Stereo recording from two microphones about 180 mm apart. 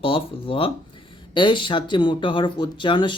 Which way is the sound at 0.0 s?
30° left (ahead or behind).